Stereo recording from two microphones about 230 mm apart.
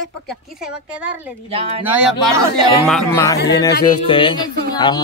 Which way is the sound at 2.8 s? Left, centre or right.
Centre.